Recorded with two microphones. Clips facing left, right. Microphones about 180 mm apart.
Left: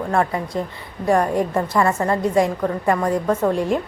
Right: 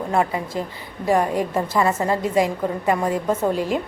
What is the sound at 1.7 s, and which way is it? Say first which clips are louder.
Speech: left 1 dB; 20° right (ahead or behind).